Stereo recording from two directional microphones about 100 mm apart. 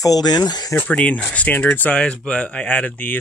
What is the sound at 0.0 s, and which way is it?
Speech, 40° left (ahead or behind).